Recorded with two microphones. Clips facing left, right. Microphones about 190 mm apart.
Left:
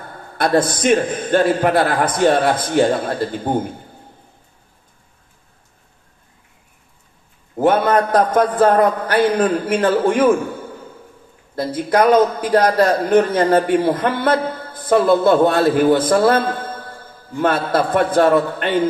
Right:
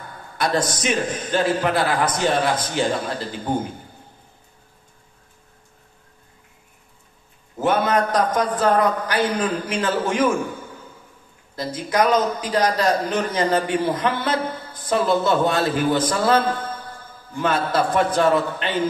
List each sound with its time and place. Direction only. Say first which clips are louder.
0.4 s a man's voice: left 6 dB; 60° left (ahead or behind)
7.6 s a man's voice: left 5 dB; 55° left (ahead or behind)
12.1 s a man's voice: left 7 dB; 55° left (ahead or behind)
16.3 s a sound: left 3 dB; 55° left (ahead or behind)
17.4 s a man's voice: left 3 dB; 55° left (ahead or behind)